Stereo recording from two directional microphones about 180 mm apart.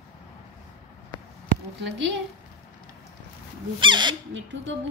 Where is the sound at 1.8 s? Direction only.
70° right (ahead or behind).